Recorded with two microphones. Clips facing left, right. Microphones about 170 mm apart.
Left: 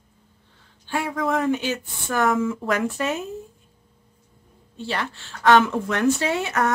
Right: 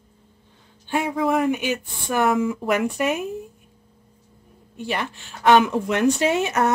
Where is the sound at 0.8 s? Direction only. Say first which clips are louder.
Right 3 dB; 20° right (ahead or behind).